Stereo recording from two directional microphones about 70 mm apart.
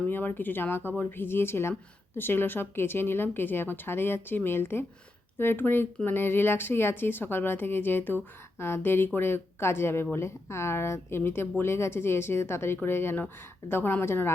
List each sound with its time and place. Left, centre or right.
0.0 s a woman's voice: left